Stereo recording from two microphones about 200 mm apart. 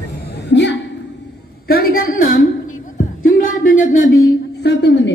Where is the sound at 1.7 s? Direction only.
50° left (ahead or behind).